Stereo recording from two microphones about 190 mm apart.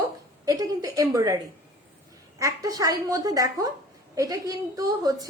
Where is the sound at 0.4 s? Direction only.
20° right (ahead or behind).